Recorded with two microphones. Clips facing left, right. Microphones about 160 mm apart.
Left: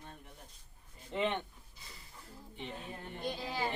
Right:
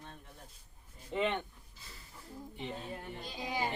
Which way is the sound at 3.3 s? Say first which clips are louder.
Right 4 dB; 15° right (ahead or behind).